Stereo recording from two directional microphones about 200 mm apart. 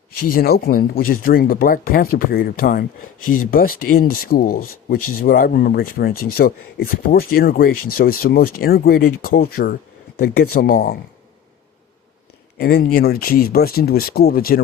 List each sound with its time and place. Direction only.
0.3 s speech: 50° left (ahead or behind)
12.5 s speech: 50° left (ahead or behind)